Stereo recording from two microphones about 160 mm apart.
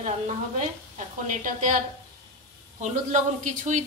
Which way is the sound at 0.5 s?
50° right (ahead or behind).